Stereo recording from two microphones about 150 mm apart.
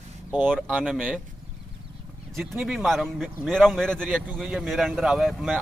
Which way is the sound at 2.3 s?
Centre (ahead or behind).